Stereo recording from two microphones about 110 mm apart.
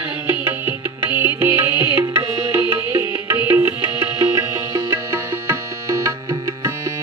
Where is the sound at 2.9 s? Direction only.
20° right (ahead or behind).